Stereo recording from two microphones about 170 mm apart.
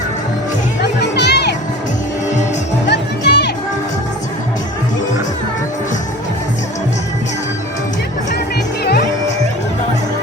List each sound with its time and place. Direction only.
0.8 s music: 80° left
2.9 s music: 80° left
8.8 s music: 70° left (ahead or behind)